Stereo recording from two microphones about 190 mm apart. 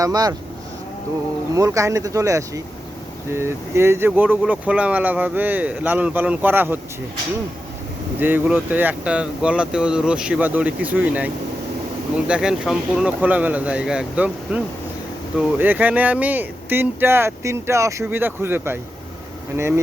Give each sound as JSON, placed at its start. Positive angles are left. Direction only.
{"t": 0.0, "sound": "speech", "side_deg": -20}
{"t": 1.5, "sound": "speech", "side_deg": -15}
{"t": 8.2, "sound": "speech", "side_deg": -10}